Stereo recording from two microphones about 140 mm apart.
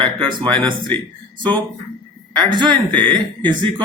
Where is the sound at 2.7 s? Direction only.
10° left (ahead or behind).